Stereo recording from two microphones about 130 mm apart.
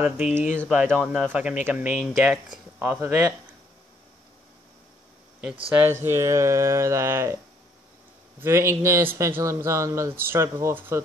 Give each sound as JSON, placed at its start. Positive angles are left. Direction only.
{"t": 0.0, "sound": "speech", "side_deg": -15}
{"t": 5.8, "sound": "speech", "side_deg": -20}
{"t": 8.4, "sound": "speech", "side_deg": -20}